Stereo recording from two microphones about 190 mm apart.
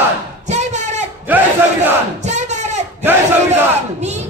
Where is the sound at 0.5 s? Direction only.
40° right (ahead or behind).